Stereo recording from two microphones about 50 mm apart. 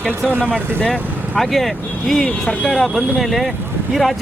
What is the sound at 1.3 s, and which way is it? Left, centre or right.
Speech, centre.